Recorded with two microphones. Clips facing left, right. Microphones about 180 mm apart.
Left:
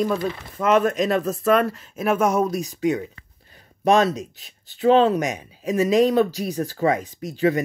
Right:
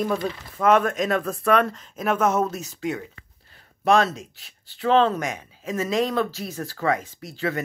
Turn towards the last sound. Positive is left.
turn(degrees=15)  # may be behind; listen again after turning